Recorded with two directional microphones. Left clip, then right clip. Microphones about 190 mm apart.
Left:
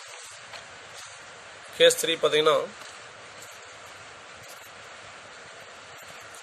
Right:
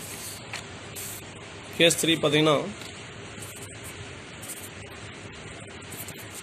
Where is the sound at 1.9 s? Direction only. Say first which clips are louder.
Even; 60° left (ahead or behind).